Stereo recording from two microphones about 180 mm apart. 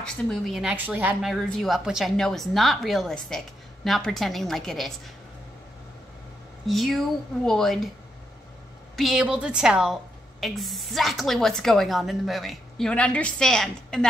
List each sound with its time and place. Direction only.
0.0 s a woman's voice: centre (ahead or behind)
1.3 s a woman's voice: centre (ahead or behind)
6.7 s a woman's voice: centre (ahead or behind)
8.9 s a woman's voice: centre (ahead or behind)